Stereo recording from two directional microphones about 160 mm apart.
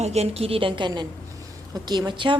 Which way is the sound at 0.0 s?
40° right (ahead or behind).